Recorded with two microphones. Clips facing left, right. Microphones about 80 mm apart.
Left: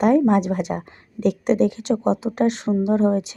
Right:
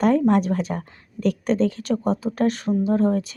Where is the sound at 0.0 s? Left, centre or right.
Centre.